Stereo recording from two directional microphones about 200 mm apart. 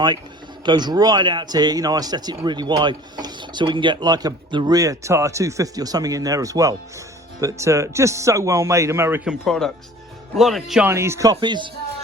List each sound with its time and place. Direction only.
0.6 s speech: 20° right (ahead or behind)
9.4 s speech: centre (ahead or behind)
10.8 s speech: 15° right (ahead or behind)